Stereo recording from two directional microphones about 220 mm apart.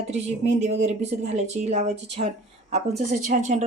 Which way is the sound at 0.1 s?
30° right (ahead or behind).